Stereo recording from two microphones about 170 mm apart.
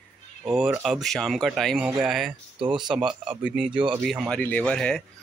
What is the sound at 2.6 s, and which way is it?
Speech, 30° right (ahead or behind).